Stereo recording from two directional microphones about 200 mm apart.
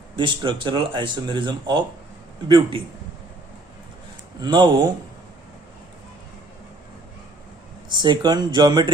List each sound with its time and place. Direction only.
0.2 s speech: 25° right (ahead or behind)
4.4 s speech: 20° right (ahead or behind)
7.9 s speech: 20° right (ahead or behind)